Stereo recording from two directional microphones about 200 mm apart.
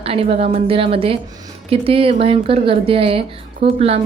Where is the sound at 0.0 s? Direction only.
30° right (ahead or behind).